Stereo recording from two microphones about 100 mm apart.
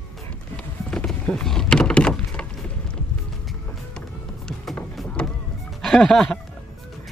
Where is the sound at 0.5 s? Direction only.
10° left (ahead or behind).